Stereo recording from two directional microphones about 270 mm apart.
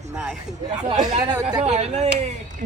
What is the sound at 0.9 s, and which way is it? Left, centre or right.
Speech, right.